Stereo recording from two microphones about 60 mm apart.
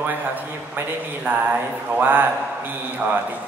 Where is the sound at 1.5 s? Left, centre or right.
Right.